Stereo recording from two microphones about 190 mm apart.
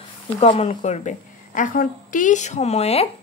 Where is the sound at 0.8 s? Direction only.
40° left (ahead or behind).